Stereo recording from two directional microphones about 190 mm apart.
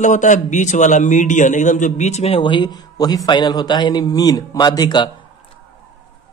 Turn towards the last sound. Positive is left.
turn(degrees=20)  # may be behind; listen again after turning